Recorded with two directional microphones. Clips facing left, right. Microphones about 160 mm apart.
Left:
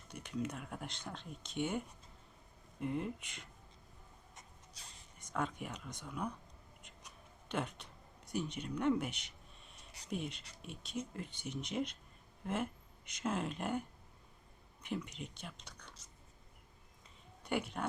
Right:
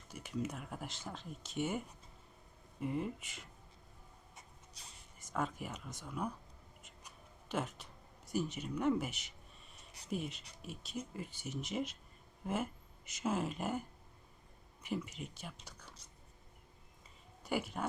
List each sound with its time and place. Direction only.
0.1 s speech: 5° right (ahead or behind)
2.8 s speech: centre (ahead or behind)
4.4 s writing: 10° right (ahead or behind)
6.8 s speech: 5° right (ahead or behind)
13.1 s speech: 5° right (ahead or behind)
17.4 s speech: 5° right (ahead or behind)